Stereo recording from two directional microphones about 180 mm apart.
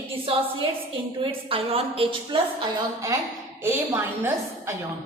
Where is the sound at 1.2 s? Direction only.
30° right (ahead or behind).